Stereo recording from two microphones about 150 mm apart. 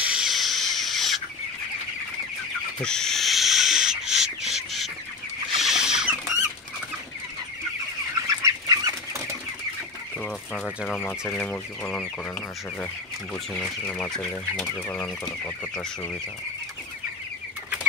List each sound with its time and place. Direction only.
0.0 s a sound: 5° right (ahead or behind)
2.8 s owl: 5° left (ahead or behind)
5.6 s rodents: 5° right (ahead or behind)
8.3 s bird flight: 25° right (ahead or behind)
10.1 s speech: 5° left (ahead or behind)
13.5 s speech: 5° left (ahead or behind)